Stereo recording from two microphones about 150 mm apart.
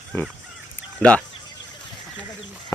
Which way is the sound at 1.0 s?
10° left (ahead or behind).